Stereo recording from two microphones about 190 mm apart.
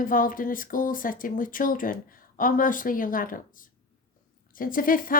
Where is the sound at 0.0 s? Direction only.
45° left (ahead or behind).